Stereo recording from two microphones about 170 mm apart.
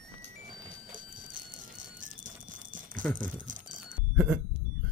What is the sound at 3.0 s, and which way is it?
Speech, 5° left (ahead or behind).